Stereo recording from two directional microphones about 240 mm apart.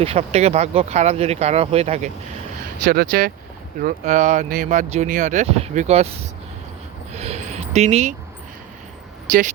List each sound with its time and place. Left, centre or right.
0.0 s speech: right
2.8 s speech: right
7.1 s a sound: right
9.3 s speech: right